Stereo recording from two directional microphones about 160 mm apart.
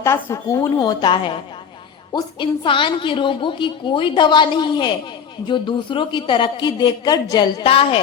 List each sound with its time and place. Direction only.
0.0 s a woman's voice: 15° left (ahead or behind); by 7.9 s 35° left (ahead or behind)